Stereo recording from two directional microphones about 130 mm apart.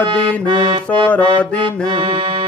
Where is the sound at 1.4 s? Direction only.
10° left (ahead or behind).